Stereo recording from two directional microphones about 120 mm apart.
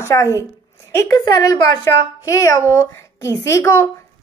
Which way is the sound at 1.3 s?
30° left (ahead or behind).